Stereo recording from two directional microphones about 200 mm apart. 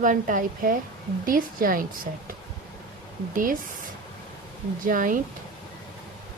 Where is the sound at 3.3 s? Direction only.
40° right (ahead or behind).